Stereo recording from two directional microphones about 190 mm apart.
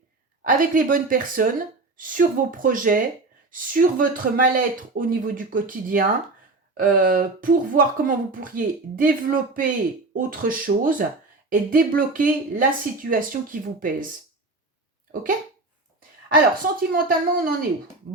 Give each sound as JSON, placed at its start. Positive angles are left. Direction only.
{"t": 0.4, "sound": "speech", "side_deg": -45}
{"t": 15.1, "sound": "speech", "side_deg": -45}
{"t": 16.9, "sound": "speech", "side_deg": -50}